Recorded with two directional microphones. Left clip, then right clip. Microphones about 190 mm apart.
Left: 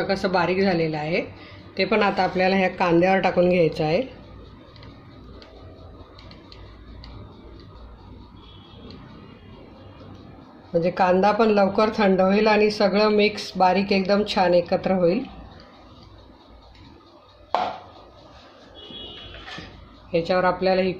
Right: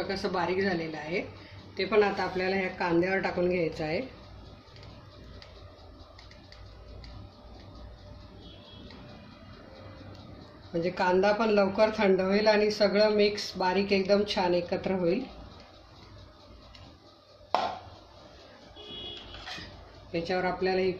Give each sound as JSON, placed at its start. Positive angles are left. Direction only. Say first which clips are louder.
{"t": 0.1, "sound": "speech", "louder": "left 8 dB", "side_deg": 45}
{"t": 10.8, "sound": "speech", "louder": "left 7 dB", "side_deg": 35}
{"t": 20.2, "sound": "speech", "louder": "left 8 dB", "side_deg": 40}